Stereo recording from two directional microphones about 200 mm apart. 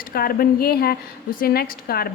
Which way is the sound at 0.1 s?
50° left (ahead or behind).